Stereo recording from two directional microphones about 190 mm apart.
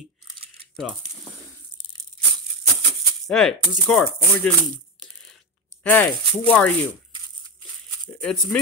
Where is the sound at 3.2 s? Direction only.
Centre (ahead or behind).